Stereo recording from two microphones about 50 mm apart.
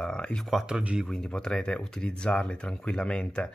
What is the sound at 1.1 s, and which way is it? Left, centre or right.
Speech, centre.